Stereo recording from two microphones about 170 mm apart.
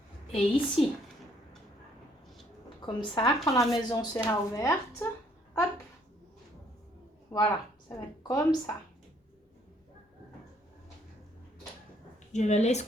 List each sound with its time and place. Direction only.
0.3 s a woman's voice: 35° left (ahead or behind)
2.8 s a woman's voice: 25° left (ahead or behind)
7.3 s speech: 25° left (ahead or behind)
12.3 s a woman's voice: 45° left (ahead or behind)